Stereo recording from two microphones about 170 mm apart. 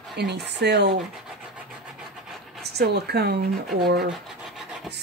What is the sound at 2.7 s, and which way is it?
Speech, 70° right (ahead or behind).